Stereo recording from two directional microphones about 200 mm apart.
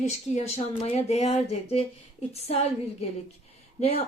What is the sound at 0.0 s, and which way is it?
Speech, 35° left (ahead or behind).